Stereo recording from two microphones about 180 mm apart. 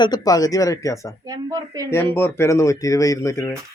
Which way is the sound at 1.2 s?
20° right (ahead or behind).